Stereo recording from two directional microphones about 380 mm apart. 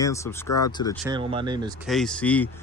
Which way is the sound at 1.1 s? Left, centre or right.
Centre.